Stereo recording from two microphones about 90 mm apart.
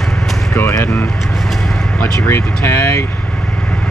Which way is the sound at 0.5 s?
30° left (ahead or behind).